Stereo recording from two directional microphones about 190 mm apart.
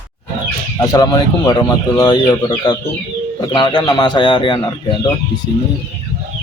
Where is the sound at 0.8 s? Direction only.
20° left (ahead or behind).